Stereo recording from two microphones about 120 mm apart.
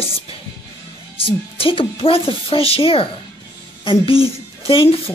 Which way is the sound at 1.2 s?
50° left (ahead or behind).